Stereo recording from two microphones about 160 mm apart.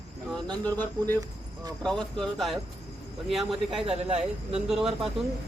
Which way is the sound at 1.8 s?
5° left (ahead or behind).